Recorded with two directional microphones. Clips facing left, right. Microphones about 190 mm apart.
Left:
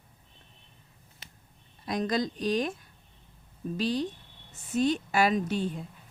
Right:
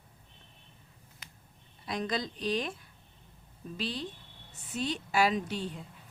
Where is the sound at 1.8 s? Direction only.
45° left (ahead or behind).